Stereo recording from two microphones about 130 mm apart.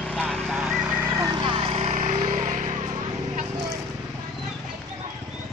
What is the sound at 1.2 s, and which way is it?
Vehicle, 35° right (ahead or behind).